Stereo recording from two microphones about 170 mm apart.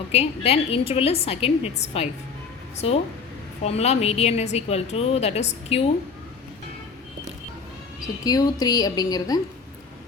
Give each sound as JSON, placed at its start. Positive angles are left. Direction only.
{"t": 0.1, "sound": "a woman's voice", "side_deg": 40}
{"t": 8.0, "sound": "a woman's voice", "side_deg": 20}